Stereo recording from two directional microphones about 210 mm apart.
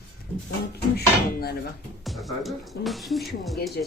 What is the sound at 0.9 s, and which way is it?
Speech, 50° left (ahead or behind).